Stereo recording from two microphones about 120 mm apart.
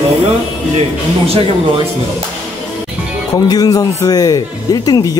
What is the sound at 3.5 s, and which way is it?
Speech, 30° left (ahead or behind).